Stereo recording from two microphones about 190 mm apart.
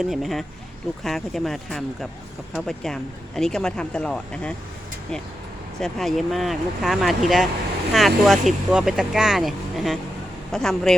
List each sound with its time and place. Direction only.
0.0 s speech: centre (ahead or behind)
5.8 s speech: centre (ahead or behind)